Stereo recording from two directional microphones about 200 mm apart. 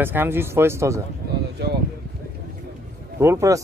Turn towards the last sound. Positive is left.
turn(degrees=-15)  # may be behind; listen again after turning